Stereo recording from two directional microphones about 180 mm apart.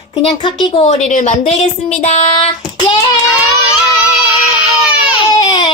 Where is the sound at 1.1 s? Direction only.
45° left (ahead or behind).